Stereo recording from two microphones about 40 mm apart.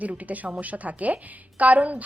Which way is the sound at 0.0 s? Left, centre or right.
Right.